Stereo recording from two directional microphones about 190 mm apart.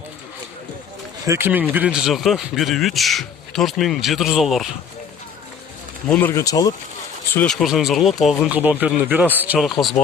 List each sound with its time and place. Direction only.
1.2 s speech: 15° right (ahead or behind)
6.1 s speech: 10° left (ahead or behind)
7.3 s speech: 5° left (ahead or behind)